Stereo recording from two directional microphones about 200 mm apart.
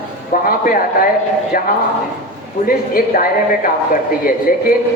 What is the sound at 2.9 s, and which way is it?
Speech, 45° left (ahead or behind).